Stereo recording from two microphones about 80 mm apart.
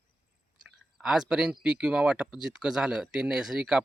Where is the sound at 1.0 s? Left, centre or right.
Centre.